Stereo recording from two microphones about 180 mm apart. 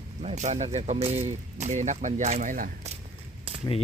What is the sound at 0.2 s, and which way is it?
Speech, 40° right (ahead or behind).